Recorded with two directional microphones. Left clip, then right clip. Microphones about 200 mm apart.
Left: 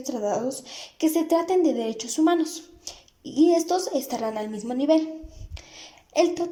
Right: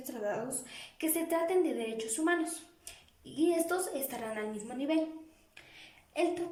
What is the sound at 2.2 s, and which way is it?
A woman's voice, 15° left (ahead or behind).